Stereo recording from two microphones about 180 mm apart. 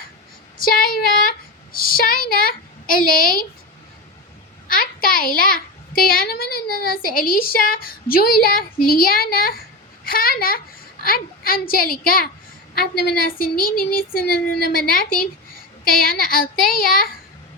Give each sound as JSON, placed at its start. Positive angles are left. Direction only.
{"t": 0.6, "sound": "a sound", "side_deg": 55}
{"t": 4.7, "sound": "a child's voice", "side_deg": 50}
{"t": 12.7, "sound": "child singing", "side_deg": 55}
{"t": 16.0, "sound": "a child's voice", "side_deg": 55}